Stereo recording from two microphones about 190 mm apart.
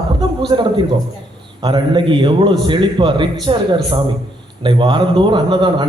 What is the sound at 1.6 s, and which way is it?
A man's voice, 25° right (ahead or behind).